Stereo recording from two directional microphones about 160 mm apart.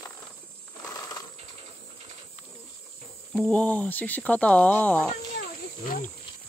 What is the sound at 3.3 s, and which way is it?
Speech, 5° left (ahead or behind).